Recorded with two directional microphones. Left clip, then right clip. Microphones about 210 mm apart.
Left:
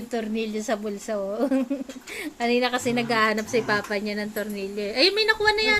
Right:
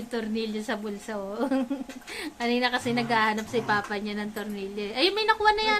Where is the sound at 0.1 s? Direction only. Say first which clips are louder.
Left 3 dB; 10° left (ahead or behind).